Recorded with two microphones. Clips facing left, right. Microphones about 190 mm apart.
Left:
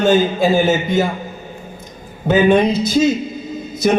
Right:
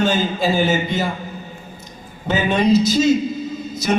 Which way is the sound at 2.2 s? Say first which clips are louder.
Left 5 dB; 50° left (ahead or behind).